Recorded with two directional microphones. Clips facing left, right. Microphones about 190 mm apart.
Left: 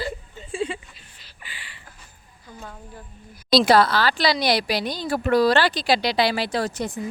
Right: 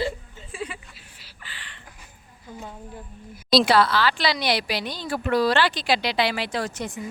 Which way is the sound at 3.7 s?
40° left (ahead or behind).